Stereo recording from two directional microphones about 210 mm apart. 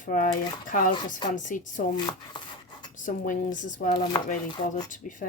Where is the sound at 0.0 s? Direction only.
40° left (ahead or behind).